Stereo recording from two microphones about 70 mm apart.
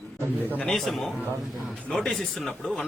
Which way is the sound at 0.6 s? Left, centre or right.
Centre.